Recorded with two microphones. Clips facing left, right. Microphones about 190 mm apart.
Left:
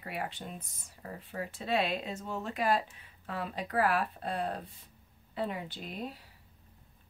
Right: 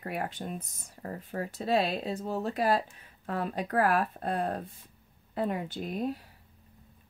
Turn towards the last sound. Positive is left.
turn(degrees=-45)  # may be behind; listen again after turning